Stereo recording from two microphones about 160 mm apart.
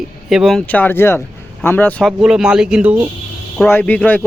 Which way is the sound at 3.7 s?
10° left (ahead or behind).